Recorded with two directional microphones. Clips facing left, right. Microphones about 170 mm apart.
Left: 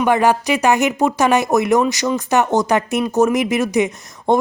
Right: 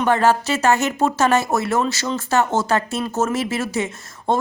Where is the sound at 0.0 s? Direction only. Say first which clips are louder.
Left 2 dB; 15° left (ahead or behind).